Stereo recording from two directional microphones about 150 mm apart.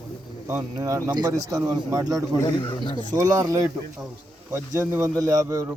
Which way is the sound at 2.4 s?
30° left (ahead or behind).